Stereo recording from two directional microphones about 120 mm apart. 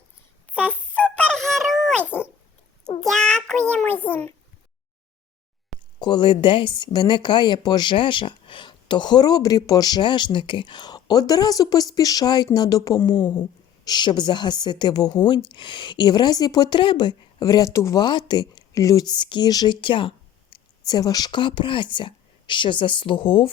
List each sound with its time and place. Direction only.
0.5 s a sound: 10° left (ahead or behind)
2.0 s cat: 15° left (ahead or behind)
3.0 s child singing: 5° left (ahead or behind)
6.0 s speech: 40° left (ahead or behind)
18.0 s speech: 40° left (ahead or behind)
20.8 s speech: 30° left (ahead or behind)